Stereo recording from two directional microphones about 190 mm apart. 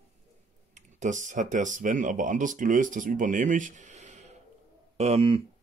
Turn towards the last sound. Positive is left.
turn(degrees=-30)  # may be behind; listen again after turning